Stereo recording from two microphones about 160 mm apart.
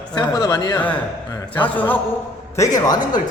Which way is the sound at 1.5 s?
10° left (ahead or behind).